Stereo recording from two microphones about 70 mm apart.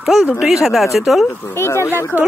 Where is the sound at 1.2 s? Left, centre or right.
Left.